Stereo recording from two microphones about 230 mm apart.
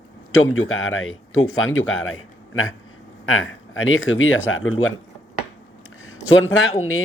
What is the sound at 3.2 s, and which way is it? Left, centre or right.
A man's voice, left.